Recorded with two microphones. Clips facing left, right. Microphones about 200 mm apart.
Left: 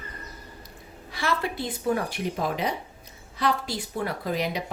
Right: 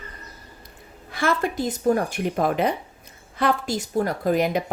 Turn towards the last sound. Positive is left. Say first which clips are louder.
# right 7 dB
turn(degrees=-50)  # may be behind; listen again after turning